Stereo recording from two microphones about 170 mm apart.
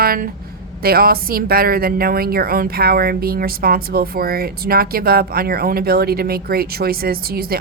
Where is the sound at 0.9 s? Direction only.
60° right (ahead or behind).